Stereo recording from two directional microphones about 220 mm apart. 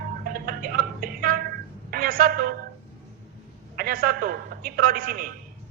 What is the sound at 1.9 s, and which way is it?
Speech, 40° right (ahead or behind).